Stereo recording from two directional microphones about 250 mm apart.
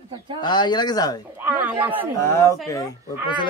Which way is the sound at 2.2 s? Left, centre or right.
Centre.